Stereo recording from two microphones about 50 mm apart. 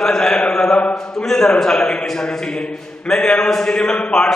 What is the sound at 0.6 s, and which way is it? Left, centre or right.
Mantra, left.